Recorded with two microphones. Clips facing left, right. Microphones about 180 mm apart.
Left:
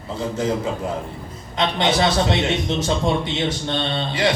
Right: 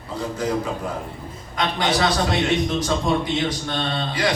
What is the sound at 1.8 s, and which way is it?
A man's voice, 25° left (ahead or behind).